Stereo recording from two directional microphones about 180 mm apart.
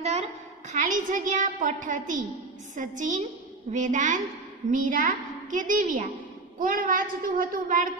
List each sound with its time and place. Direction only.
0.0 s a woman's voice: 35° right (ahead or behind)